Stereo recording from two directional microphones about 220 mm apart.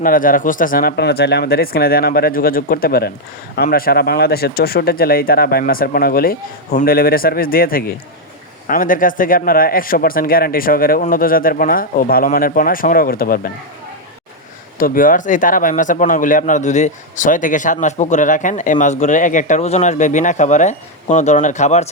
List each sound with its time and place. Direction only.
0.0 s speech: 40° left (ahead or behind)
14.8 s speech: 40° left (ahead or behind)